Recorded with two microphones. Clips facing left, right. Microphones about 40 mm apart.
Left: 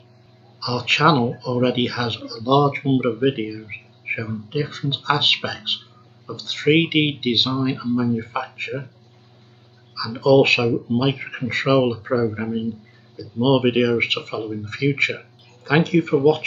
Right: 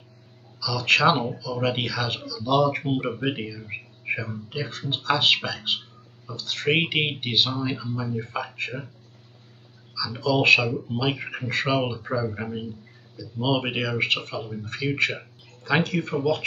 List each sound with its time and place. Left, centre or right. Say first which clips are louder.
0.6 s speech: left 2 dB; left; by 2.2 s centre
2.2 s speech: left 6 dB; left
2.6 s speech: left 5 dB; centre
10.1 s speech: left 5 dB; centre
11.1 s speech: left 4 dB; centre
15.0 s a sound: left 3 dB; centre
15.8 s speech: left 8 dB; centre